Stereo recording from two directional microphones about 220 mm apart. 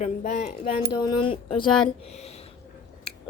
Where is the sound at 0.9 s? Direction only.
20° left (ahead or behind).